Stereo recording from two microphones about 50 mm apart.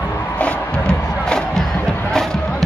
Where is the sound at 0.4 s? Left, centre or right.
Left.